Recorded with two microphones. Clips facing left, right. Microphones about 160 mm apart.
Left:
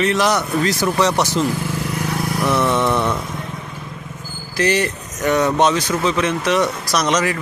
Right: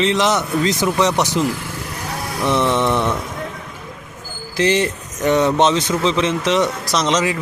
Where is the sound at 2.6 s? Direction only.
10° left (ahead or behind).